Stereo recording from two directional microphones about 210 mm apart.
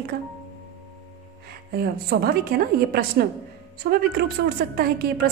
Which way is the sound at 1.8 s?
45° right (ahead or behind).